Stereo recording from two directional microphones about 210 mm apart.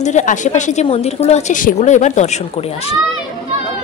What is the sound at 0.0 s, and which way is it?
A woman's voice, 35° left (ahead or behind).